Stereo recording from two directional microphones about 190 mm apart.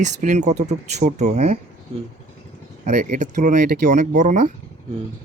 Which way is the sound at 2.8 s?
40° right (ahead or behind).